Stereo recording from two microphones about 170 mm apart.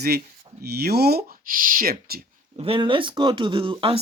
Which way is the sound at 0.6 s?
70° right (ahead or behind).